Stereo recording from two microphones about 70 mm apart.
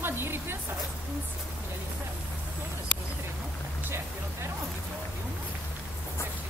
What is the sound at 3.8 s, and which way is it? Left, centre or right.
Speech, right.